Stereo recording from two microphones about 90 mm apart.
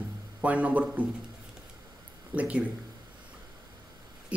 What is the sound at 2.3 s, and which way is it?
Speech, 15° right (ahead or behind).